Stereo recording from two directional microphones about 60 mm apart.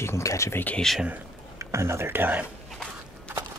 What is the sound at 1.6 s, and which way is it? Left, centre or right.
Speech, right.